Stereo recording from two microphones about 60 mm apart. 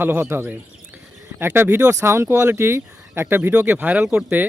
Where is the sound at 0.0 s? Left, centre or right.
Right.